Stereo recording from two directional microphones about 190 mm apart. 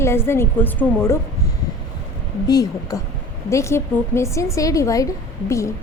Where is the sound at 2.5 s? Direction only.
20° left (ahead or behind).